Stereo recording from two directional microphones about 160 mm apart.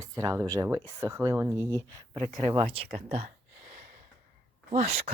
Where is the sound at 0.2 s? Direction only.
20° right (ahead or behind).